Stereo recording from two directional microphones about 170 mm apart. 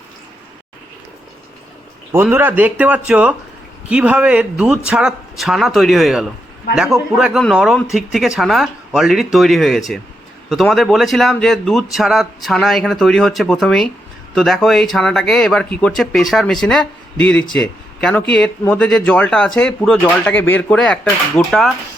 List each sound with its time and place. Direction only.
2.3 s speech: 10° right (ahead or behind); by 21.7 s 5° left (ahead or behind)